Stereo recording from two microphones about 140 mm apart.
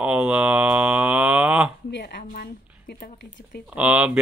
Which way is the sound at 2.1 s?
90° left.